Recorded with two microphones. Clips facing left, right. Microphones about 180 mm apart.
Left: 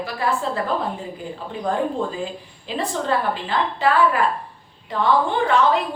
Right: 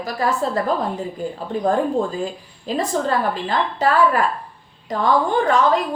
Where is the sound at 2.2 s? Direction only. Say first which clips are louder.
Right 3 dB; 40° right (ahead or behind).